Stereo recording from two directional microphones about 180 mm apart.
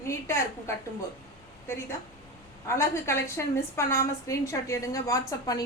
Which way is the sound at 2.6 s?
15° left (ahead or behind).